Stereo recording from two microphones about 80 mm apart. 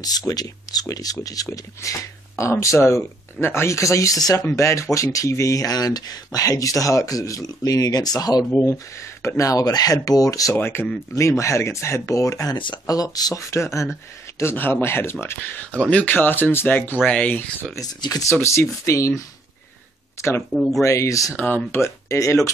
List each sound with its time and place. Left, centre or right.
0.3 s speech: left
4.6 s speech: left
8.6 s speech: left
10.5 s speech: left
11.1 s speech: left
12.5 s speech: left
12.8 s speech: left
15.8 s speech: centre
16.1 s speech: left
17.7 s speech: left
18.3 s speech: left
20.5 s speech: centre
20.8 s speech: left